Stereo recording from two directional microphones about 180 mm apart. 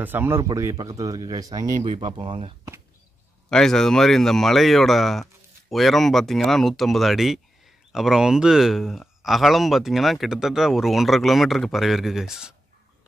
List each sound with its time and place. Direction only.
0.0 s speech: 10° right (ahead or behind); by 2.5 s 30° right (ahead or behind)
3.4 s speech: 5° left (ahead or behind)